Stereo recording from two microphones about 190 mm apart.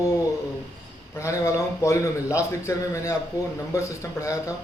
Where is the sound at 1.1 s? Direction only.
15° left (ahead or behind).